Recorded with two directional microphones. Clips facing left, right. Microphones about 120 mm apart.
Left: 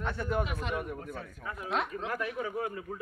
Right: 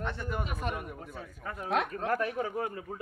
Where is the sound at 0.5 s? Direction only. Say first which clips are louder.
Left 1 dB; 45° right (ahead or behind).